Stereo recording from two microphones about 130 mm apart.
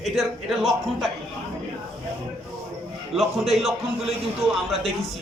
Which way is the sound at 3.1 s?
Centre (ahead or behind).